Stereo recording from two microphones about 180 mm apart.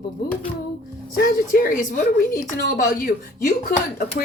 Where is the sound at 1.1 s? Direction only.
55° left (ahead or behind).